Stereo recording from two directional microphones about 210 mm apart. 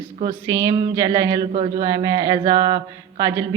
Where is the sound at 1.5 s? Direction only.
30° right (ahead or behind).